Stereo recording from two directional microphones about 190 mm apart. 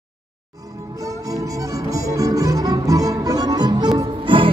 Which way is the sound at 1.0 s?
20° right (ahead or behind).